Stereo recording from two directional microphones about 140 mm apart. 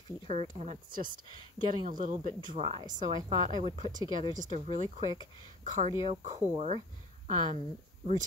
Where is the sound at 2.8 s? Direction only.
30° right (ahead or behind).